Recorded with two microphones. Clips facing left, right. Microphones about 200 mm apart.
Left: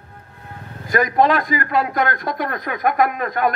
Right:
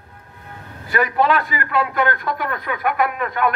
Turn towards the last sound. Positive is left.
turn(degrees=40)  # may be behind; listen again after turning